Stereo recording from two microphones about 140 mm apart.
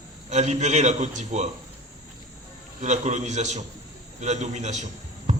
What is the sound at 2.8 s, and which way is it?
A man's voice, 55° right (ahead or behind).